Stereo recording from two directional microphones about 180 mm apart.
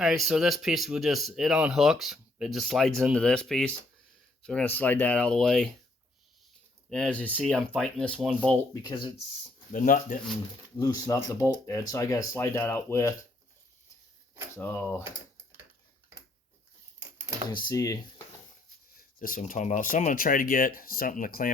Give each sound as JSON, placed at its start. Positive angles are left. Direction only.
{"t": 0.0, "sound": "speech", "side_deg": 0}
{"t": 6.9, "sound": "speech", "side_deg": 5}
{"t": 8.7, "sound": "speech", "side_deg": 25}
{"t": 9.7, "sound": "speech", "side_deg": 50}
{"t": 10.8, "sound": "speech", "side_deg": 20}
{"t": 14.5, "sound": "speech", "side_deg": 10}
{"t": 17.0, "sound": "a sound", "side_deg": -15}
{"t": 17.5, "sound": "speech", "side_deg": 25}
{"t": 18.9, "sound": "speech", "side_deg": 50}